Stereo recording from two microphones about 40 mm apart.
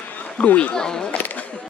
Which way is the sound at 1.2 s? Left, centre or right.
Left.